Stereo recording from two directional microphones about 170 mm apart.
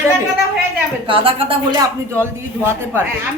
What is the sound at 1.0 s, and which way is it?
Speech, 30° right (ahead or behind).